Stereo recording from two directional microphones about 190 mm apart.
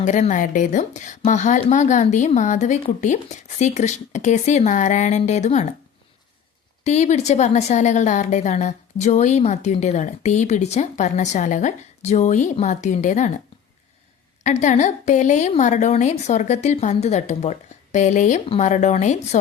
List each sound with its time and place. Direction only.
0.0 s a woman's voice: 40° left (ahead or behind)
6.8 s a woman's voice: 35° left (ahead or behind)
14.4 s a woman's voice: 40° left (ahead or behind)